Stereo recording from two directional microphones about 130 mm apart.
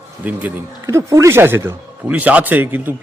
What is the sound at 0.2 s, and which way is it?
Speech, 10° right (ahead or behind).